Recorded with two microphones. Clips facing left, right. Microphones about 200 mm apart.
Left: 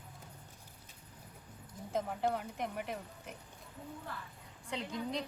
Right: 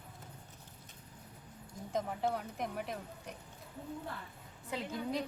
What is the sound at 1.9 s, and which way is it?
Speech, centre (ahead or behind).